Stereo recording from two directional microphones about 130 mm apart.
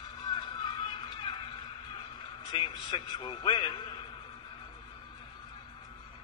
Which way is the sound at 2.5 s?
35° left (ahead or behind).